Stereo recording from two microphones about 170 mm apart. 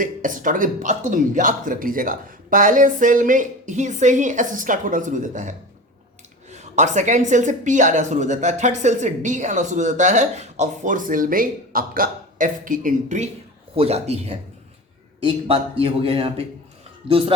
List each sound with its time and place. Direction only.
0.0 s a woman's voice: 50° right (ahead or behind); by 17.3 s 30° right (ahead or behind)